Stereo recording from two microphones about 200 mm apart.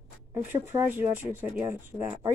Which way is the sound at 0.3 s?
10° right (ahead or behind).